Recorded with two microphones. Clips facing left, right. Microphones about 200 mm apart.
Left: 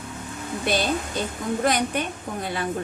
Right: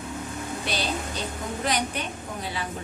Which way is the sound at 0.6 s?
50° left (ahead or behind).